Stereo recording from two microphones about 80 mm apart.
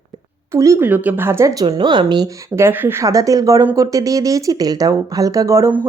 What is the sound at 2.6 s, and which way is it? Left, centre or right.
Speech, right.